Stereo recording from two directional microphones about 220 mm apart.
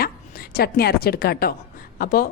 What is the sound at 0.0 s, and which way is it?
A woman's voice, 45° left (ahead or behind).